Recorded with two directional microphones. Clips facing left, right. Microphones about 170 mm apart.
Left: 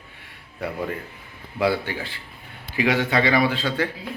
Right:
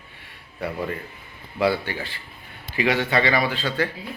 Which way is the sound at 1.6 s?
15° left (ahead or behind).